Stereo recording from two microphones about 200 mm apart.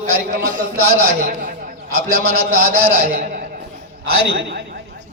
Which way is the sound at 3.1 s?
45° right (ahead or behind).